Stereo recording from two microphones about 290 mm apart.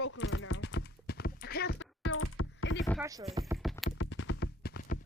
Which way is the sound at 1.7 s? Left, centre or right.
Left.